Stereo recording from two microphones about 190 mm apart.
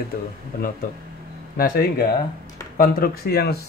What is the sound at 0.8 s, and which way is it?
Speech, 45° left (ahead or behind).